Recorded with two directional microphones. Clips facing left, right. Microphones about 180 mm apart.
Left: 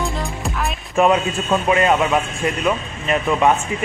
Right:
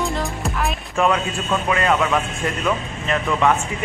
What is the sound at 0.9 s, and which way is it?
A man's voice, 20° left (ahead or behind).